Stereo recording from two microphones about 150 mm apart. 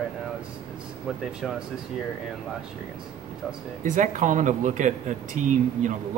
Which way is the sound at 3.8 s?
60° right (ahead or behind).